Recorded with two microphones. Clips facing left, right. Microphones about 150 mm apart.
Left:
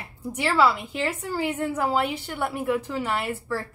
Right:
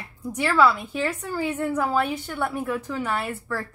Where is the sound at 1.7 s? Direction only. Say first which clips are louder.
Right 1 dB; 15° left (ahead or behind).